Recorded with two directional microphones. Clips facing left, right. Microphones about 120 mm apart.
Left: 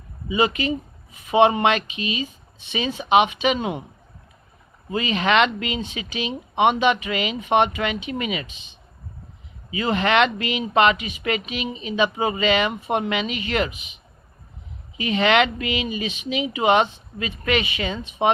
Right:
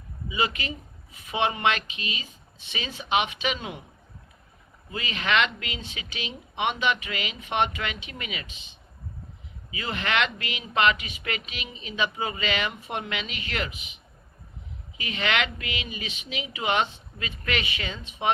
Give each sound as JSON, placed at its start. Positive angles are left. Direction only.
{"t": 0.3, "sound": "speech", "side_deg": 25}
{"t": 4.9, "sound": "speech", "side_deg": 25}
{"t": 14.9, "sound": "speech", "side_deg": 25}